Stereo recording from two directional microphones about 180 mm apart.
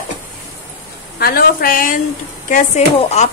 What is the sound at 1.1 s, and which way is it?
A woman's voice, 55° left (ahead or behind).